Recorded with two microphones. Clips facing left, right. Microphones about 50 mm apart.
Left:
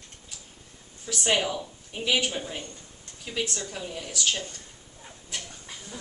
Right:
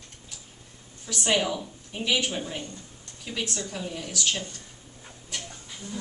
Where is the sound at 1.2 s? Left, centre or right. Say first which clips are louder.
Even; centre.